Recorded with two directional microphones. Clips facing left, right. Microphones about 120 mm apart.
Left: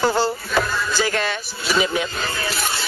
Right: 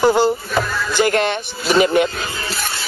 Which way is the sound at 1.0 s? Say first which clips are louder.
Right 6 dB; 55° right (ahead or behind).